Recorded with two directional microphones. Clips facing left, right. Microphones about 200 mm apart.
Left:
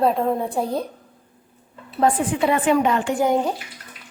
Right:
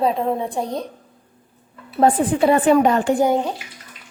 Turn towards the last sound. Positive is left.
turn(degrees=5)  # may be behind; listen again after turning